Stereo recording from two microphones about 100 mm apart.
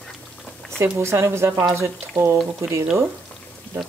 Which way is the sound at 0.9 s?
25° right (ahead or behind).